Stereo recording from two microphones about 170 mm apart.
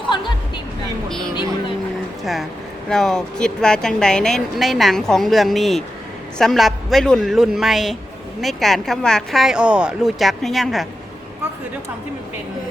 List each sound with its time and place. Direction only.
0.1 s music: 30° left (ahead or behind)
1.3 s vehicle: 25° left (ahead or behind)
2.2 s a woman's voice: centre (ahead or behind)